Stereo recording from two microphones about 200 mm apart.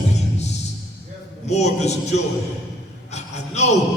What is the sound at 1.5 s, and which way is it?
Speech, 35° left (ahead or behind).